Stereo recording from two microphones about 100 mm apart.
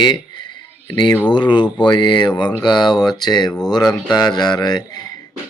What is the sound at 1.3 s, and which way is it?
Speech, 50° left (ahead or behind).